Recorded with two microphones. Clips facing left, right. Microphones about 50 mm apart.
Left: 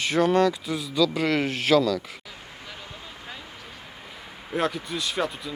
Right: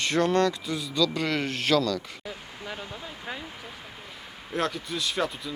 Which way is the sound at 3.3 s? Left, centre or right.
Centre.